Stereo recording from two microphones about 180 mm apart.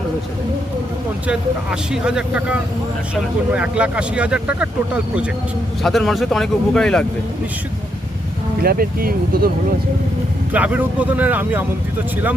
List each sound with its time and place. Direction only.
1.3 s a man's voice: 5° right (ahead or behind)
3.5 s speech: 5° right (ahead or behind)
5.8 s a man's voice: centre (ahead or behind)
8.6 s speech: 55° right (ahead or behind)
10.5 s speech: 10° right (ahead or behind)